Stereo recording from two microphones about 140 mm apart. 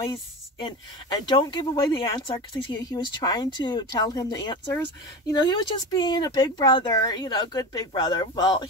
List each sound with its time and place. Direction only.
0.7 s speech: 35° left (ahead or behind)